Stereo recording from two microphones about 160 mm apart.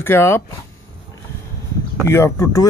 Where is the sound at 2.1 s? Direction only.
15° left (ahead or behind).